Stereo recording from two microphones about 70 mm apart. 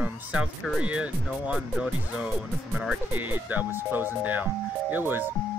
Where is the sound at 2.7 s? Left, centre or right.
Centre.